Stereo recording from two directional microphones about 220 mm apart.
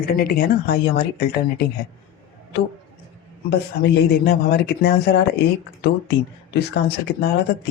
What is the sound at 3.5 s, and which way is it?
A woman's voice, 50° left (ahead or behind).